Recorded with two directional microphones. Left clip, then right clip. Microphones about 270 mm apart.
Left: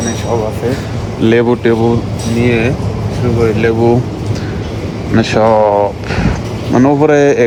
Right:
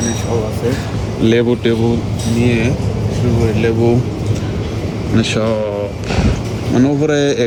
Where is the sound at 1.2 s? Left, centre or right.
Centre.